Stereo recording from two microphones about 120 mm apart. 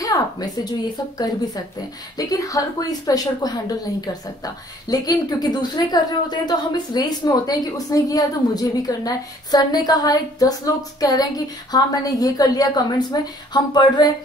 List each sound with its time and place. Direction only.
0.0 s a sound: 30° left (ahead or behind)
1.1 s speech: 30° left (ahead or behind)
4.8 s speech: 30° left (ahead or behind)